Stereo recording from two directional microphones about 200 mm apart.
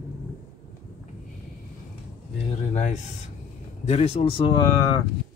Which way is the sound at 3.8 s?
30° left (ahead or behind).